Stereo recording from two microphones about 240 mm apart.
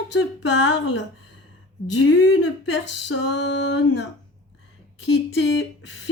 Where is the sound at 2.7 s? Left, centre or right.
Left.